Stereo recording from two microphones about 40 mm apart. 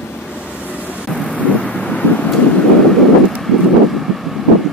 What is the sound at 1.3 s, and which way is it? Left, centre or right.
Thunder, left.